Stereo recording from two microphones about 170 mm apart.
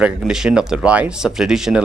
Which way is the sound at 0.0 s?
5° right (ahead or behind).